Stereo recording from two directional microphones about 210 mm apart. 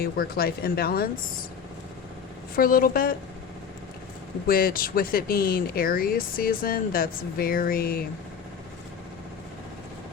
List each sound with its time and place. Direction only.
0.0 s speech: 45° left (ahead or behind)
2.6 s speech: 45° left (ahead or behind)
4.4 s speech: 45° left (ahead or behind)